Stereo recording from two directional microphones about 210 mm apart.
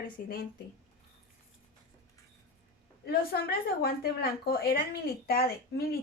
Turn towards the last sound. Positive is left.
turn(degrees=45)  # may be behind; listen again after turning